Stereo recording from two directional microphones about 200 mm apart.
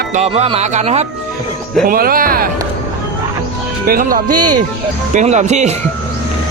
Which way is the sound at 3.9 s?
45° right (ahead or behind).